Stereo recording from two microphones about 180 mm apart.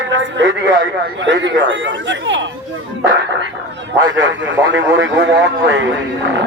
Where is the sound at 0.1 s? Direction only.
90° right.